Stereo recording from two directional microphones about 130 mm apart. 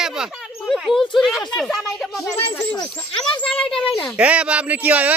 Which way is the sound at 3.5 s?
5° left (ahead or behind).